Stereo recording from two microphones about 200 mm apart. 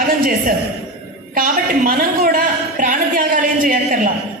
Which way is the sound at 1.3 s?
45° right (ahead or behind).